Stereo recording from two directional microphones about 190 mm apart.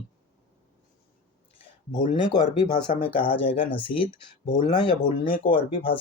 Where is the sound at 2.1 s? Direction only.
20° left (ahead or behind).